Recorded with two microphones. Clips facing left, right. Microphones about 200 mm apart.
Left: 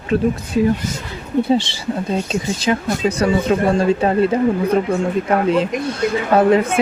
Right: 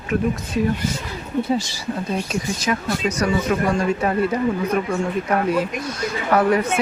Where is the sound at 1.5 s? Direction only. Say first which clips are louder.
Left 5 dB; 30° left (ahead or behind).